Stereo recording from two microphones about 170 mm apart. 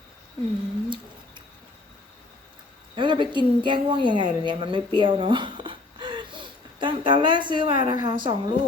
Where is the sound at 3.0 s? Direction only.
25° right (ahead or behind).